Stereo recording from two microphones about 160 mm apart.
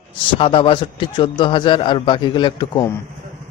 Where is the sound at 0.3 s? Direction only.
35° left (ahead or behind).